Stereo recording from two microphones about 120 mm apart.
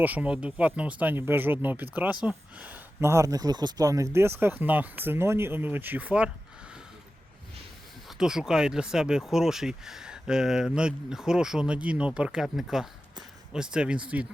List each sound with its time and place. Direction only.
0.0 s speech: 15° right (ahead or behind)
8.2 s speech: 5° right (ahead or behind)